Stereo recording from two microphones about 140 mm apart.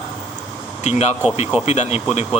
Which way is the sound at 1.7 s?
50° left (ahead or behind).